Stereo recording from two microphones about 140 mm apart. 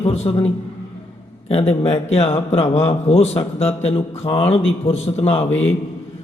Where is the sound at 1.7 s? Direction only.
45° left (ahead or behind).